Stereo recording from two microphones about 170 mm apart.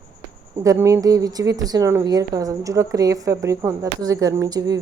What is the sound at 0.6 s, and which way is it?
Speech, 20° right (ahead or behind).